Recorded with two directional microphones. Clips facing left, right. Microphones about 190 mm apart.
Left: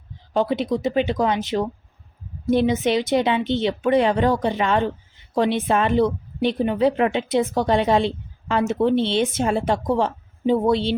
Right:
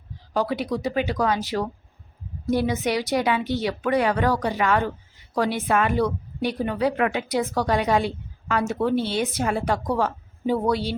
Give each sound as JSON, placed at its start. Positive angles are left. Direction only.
{"t": 0.3, "sound": "a woman's voice", "side_deg": 25}